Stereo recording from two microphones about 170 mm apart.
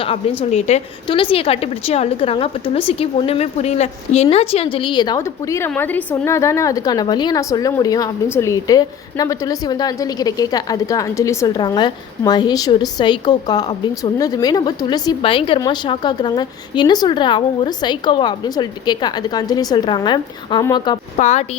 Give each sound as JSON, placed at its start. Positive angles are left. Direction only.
{"t": 0.5, "sound": "a woman's voice", "side_deg": 35}
{"t": 21.2, "sound": "a woman's voice", "side_deg": 40}